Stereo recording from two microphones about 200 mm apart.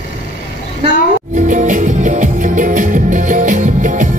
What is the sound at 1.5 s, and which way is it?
Music, 40° right (ahead or behind).